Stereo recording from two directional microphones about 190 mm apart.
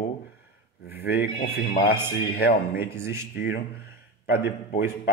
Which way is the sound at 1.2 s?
55° left (ahead or behind).